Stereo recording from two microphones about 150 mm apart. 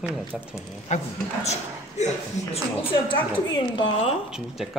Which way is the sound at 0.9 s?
50° left (ahead or behind).